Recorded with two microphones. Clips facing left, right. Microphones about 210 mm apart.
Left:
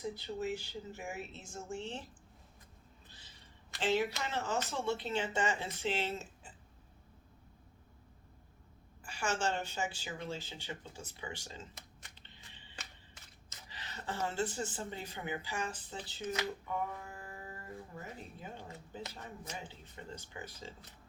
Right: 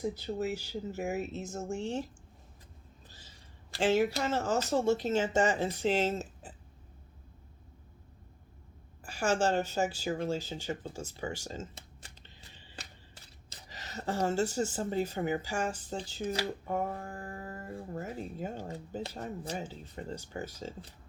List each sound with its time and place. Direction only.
0.0 s speech: 45° right (ahead or behind)
3.8 s speech: 45° right (ahead or behind)
9.0 s speech: 40° right (ahead or behind)
11.7 s a sound: 30° right (ahead or behind); by 16.0 s 45° right (ahead or behind)
16.0 s speech: 40° right (ahead or behind)
16.6 s mantra: 45° right (ahead or behind)
18.3 s speech: 45° right (ahead or behind)